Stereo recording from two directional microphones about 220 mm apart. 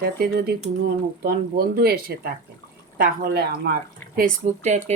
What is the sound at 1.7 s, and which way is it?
Speech, 45° right (ahead or behind).